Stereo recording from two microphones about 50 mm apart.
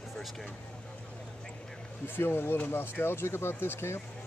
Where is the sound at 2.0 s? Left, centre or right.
Left.